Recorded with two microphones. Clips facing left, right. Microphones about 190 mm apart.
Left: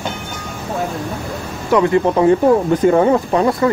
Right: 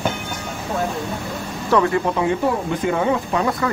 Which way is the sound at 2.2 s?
40° left (ahead or behind).